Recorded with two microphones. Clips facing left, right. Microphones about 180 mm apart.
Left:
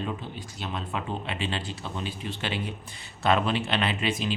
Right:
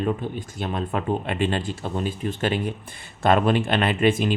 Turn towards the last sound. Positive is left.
turn(degrees=-55)  # may be behind; listen again after turning